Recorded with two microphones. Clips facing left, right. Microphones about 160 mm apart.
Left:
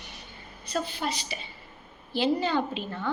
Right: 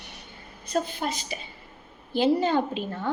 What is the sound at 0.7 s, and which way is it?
A woman's voice, 45° right (ahead or behind).